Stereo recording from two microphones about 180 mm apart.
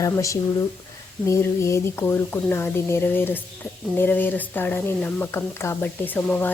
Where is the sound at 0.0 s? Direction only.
15° left (ahead or behind).